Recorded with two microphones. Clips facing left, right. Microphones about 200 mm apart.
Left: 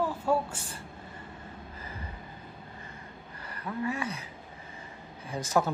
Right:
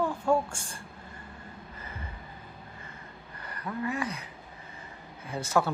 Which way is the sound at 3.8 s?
25° left (ahead or behind).